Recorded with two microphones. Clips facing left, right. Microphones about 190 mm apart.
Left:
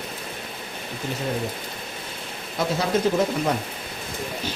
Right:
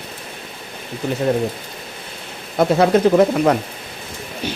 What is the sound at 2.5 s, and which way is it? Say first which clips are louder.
Speech: right 9 dB; 60° right (ahead or behind).